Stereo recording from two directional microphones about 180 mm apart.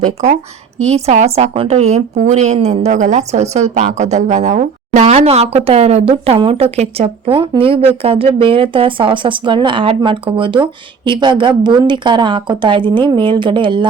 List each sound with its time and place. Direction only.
0.0 s a woman's voice: 40° right (ahead or behind); by 13.8 s 25° right (ahead or behind)